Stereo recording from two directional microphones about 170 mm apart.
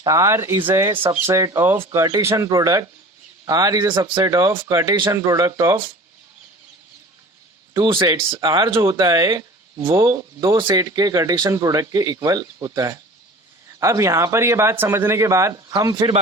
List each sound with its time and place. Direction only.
0.0 s speech: 20° right (ahead or behind)
7.9 s speech: 25° right (ahead or behind)